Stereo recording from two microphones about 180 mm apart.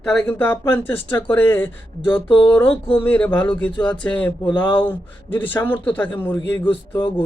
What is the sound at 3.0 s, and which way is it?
Speech, 10° left (ahead or behind).